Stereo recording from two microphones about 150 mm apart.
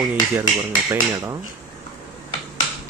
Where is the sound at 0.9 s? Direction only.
20° right (ahead or behind).